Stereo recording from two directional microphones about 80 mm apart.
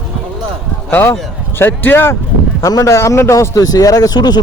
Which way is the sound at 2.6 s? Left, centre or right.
Left.